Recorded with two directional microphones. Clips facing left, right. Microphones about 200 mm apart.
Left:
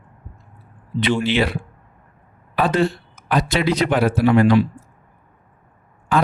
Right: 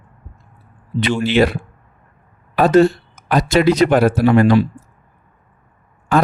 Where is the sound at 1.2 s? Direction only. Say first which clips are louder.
Right 5 dB; 45° right (ahead or behind).